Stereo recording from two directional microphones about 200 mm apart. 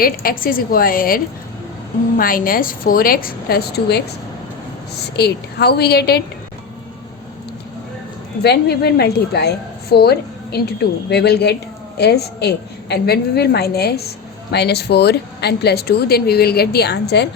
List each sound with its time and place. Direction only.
0.0 s a woman's voice: 45° left (ahead or behind)
5.1 s a woman's voice: 55° left (ahead or behind)
8.4 s a woman's voice: 55° left (ahead or behind)